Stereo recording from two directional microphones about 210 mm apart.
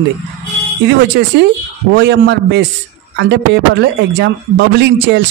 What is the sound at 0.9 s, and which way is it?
A man's voice, 55° right (ahead or behind).